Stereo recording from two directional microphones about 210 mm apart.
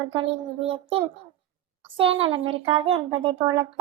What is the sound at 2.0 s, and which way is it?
A child's voice, 25° right (ahead or behind).